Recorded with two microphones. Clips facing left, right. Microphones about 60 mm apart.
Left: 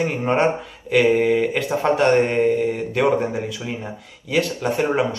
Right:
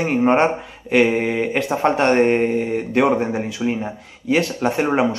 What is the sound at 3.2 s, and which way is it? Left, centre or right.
A man's voice, right.